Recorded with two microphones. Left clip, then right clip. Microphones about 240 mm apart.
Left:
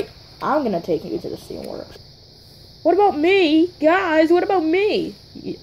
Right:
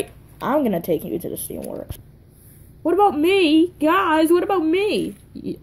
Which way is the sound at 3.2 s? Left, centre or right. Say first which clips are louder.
Left 1 dB; right.